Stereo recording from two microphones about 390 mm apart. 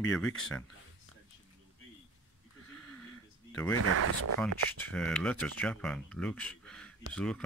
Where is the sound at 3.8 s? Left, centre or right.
Right.